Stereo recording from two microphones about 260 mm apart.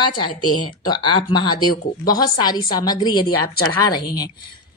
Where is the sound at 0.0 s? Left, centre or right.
Centre.